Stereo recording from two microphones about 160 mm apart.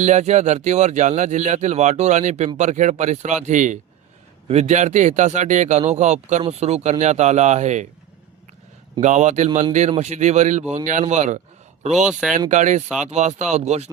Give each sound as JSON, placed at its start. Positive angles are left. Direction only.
{"t": 0.0, "sound": "speech", "side_deg": -45}
{"t": 9.0, "sound": "speech", "side_deg": -50}